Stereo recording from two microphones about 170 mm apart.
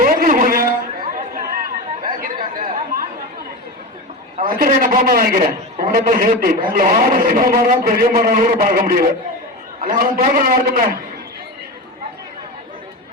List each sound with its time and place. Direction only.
0.0 s a sound: 50° right (ahead or behind)
1.3 s chatter: 55° right (ahead or behind)
4.4 s a man's voice: 55° right (ahead or behind)